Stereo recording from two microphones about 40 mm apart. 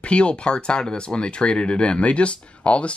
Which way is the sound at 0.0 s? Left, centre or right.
Left.